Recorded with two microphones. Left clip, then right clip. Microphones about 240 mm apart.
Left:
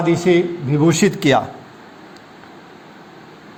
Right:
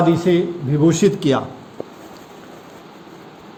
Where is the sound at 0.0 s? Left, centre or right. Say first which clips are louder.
Left 1 dB; left.